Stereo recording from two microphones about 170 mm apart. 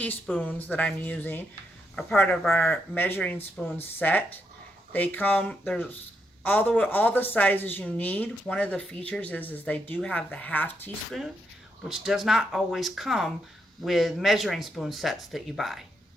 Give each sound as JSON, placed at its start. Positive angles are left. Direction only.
{"t": 0.0, "sound": "speech", "side_deg": 10}
{"t": 11.9, "sound": "speech", "side_deg": 0}